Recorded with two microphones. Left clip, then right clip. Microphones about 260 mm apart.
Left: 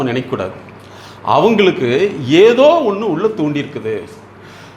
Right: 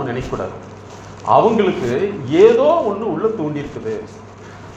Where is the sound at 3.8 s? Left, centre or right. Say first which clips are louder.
Left 4 dB; left.